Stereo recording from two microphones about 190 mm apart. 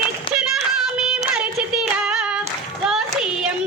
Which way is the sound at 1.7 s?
5° right (ahead or behind).